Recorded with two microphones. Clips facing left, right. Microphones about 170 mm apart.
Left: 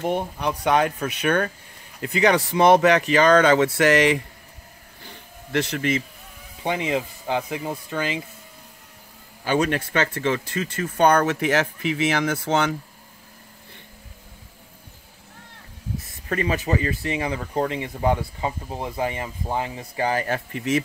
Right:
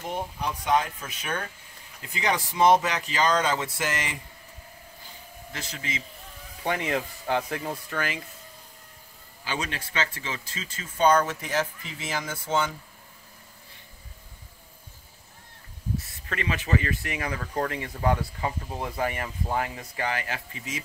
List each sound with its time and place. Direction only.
0.0 s speech: 70° left (ahead or behind)
5.0 s a sound: 70° left (ahead or behind)
6.6 s speech: 20° left (ahead or behind)
9.4 s speech: 55° left (ahead or behind); by 12.7 s 75° left (ahead or behind)
16.3 s speech: 30° left (ahead or behind)
20.5 s speech: 65° left (ahead or behind)